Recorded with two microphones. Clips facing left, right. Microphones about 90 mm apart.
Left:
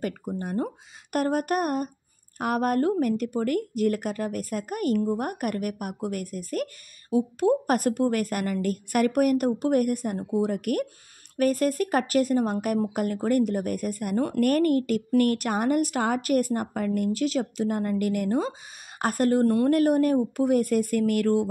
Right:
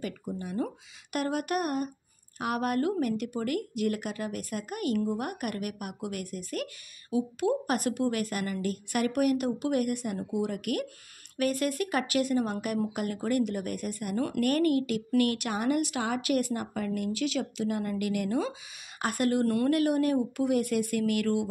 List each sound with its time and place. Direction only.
0.0 s speech: 50° left (ahead or behind); by 19.7 s 30° left (ahead or behind)
19.7 s speech: 40° left (ahead or behind)